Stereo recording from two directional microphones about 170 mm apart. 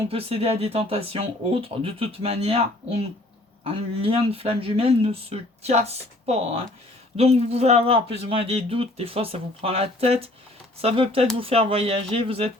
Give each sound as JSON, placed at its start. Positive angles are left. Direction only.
{"t": 0.1, "sound": "speech", "side_deg": -35}